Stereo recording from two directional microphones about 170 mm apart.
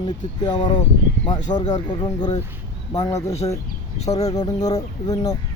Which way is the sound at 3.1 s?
40° left (ahead or behind).